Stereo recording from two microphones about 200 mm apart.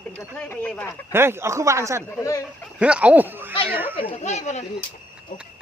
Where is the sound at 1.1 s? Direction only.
10° right (ahead or behind).